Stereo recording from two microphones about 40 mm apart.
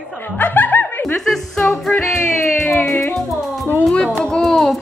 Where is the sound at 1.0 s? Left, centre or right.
Centre.